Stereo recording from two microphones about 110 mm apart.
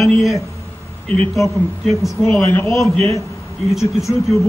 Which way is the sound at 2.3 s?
15° left (ahead or behind).